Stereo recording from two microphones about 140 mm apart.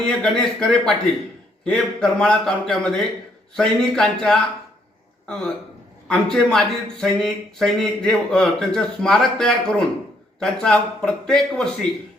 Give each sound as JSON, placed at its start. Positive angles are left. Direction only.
{"t": 0.1, "sound": "a man's voice", "side_deg": 5}